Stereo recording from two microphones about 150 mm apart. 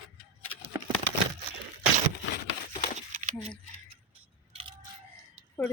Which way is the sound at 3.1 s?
55° right (ahead or behind).